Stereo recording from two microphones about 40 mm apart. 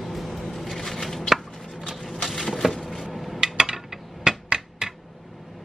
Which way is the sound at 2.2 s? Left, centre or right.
Centre.